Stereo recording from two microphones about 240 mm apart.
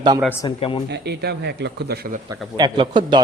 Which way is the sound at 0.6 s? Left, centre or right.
Left.